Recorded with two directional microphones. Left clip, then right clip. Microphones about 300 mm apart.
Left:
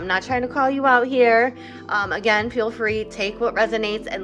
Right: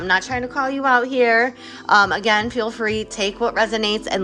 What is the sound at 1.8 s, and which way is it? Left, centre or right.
A woman's voice, centre.